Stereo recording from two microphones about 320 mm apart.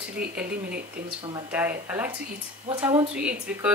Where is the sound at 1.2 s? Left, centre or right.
Centre.